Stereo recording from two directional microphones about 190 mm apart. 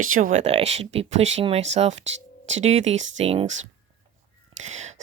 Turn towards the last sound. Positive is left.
turn(degrees=-35)  # may be behind; listen again after turning